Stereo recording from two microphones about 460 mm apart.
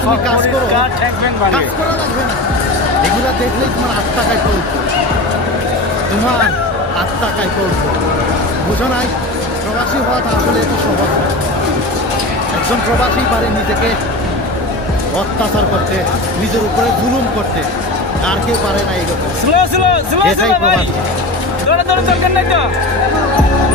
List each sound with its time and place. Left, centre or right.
19.5 s speech: right